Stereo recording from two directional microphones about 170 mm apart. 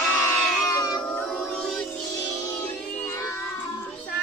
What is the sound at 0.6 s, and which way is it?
Cat, 20° left (ahead or behind).